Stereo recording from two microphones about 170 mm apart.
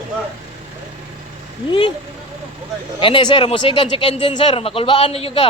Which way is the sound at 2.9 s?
30° left (ahead or behind).